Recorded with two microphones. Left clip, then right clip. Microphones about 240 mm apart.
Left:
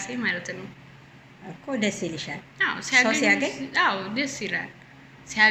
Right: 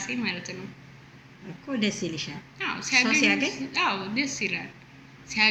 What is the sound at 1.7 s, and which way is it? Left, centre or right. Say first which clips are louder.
A woman's voice: left 2 dB; centre.